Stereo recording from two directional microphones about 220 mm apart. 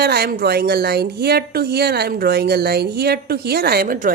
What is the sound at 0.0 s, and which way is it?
A woman's voice, 45° right (ahead or behind).